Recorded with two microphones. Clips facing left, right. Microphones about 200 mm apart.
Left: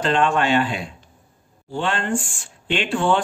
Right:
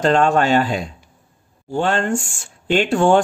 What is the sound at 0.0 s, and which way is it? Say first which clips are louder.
Speech: right 4 dB; 40° right (ahead or behind).